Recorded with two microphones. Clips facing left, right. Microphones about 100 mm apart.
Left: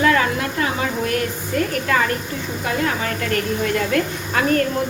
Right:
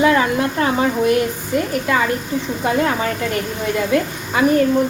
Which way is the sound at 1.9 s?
15° right (ahead or behind).